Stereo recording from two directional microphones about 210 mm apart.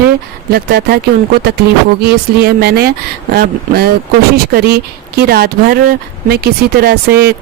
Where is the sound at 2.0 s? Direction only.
50° right (ahead or behind).